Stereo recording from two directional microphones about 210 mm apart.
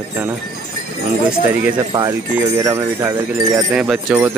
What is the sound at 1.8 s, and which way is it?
Speech, 15° right (ahead or behind).